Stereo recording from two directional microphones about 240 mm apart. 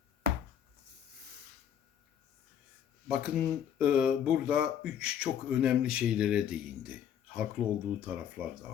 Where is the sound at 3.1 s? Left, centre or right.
Centre.